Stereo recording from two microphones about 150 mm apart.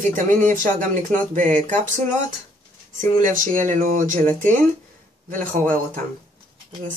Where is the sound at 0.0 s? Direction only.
60° right (ahead or behind).